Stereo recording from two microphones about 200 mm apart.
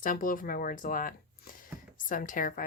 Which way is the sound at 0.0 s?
45° left (ahead or behind).